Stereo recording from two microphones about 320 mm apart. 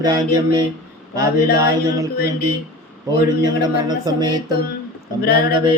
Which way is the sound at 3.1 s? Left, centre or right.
Left.